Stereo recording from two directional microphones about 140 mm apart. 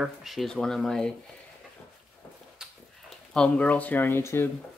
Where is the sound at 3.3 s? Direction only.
5° left (ahead or behind).